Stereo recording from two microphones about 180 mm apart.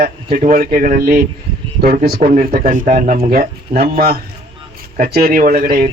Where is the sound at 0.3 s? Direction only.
50° right (ahead or behind).